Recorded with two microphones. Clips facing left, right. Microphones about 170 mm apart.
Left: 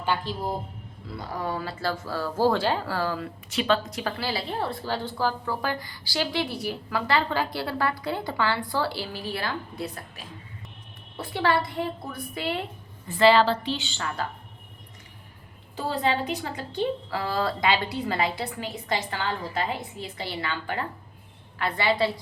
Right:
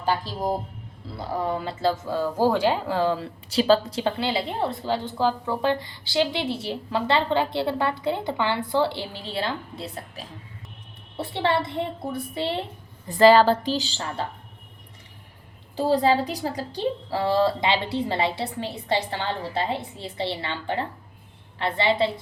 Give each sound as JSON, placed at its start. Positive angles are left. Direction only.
{"t": 0.0, "sound": "a man's voice", "side_deg": -40}
{"t": 1.2, "sound": "speech", "side_deg": -25}
{"t": 13.1, "sound": "a woman's voice", "side_deg": -40}
{"t": 15.7, "sound": "a woman's voice", "side_deg": -35}